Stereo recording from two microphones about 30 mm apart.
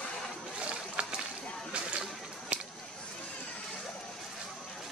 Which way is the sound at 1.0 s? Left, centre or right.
Right.